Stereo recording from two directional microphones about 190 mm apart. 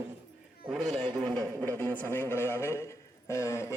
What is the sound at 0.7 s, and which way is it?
A man's voice, centre (ahead or behind).